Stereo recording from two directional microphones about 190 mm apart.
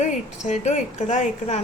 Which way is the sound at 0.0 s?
40° left (ahead or behind).